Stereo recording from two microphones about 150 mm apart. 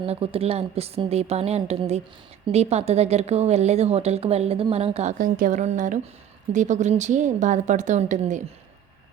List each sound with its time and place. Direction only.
0.0 s a woman's voice: 40° right (ahead or behind); by 8.4 s 55° right (ahead or behind)